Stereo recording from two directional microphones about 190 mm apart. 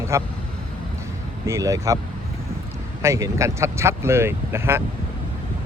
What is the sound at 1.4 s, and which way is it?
Speech, 15° right (ahead or behind).